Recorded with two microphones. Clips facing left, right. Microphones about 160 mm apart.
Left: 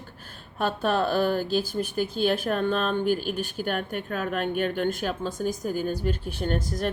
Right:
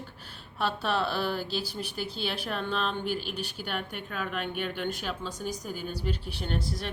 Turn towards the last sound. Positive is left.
turn(degrees=45)  # may be behind; listen again after turning